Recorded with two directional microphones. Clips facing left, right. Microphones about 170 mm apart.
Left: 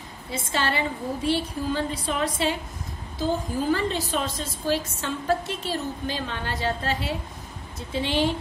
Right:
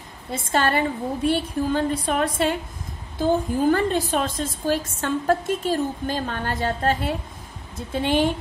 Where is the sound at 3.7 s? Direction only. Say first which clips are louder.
Right 3 dB; 50° right (ahead or behind).